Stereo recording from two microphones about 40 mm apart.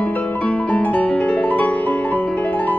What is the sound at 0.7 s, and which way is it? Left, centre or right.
Music, left.